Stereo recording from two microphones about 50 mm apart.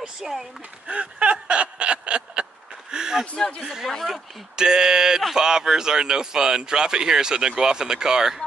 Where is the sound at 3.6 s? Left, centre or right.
Centre.